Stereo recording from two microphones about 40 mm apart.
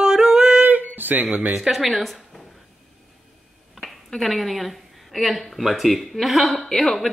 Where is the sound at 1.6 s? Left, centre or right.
Centre.